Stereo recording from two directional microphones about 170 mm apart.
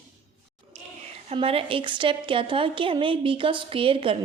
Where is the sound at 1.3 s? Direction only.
35° right (ahead or behind).